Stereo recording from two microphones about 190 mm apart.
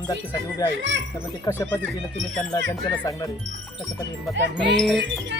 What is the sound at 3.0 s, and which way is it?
Speech, 20° left (ahead or behind).